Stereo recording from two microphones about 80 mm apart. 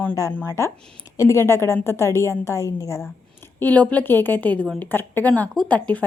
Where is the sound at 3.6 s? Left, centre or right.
Left.